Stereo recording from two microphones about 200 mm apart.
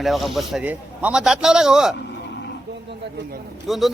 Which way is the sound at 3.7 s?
Centre (ahead or behind).